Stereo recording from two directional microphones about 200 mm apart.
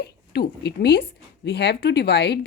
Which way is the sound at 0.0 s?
55° left (ahead or behind).